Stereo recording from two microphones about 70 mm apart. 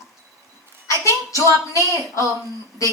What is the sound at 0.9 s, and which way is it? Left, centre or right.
Child singing, left.